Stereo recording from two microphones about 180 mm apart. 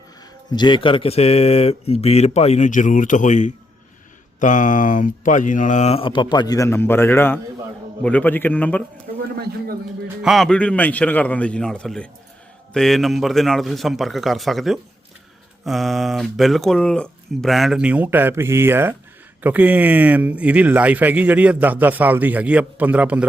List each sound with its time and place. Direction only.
0.5 s a man's voice: 25° left (ahead or behind); by 8.8 s 10° left (ahead or behind)
10.2 s a man's voice: centre (ahead or behind)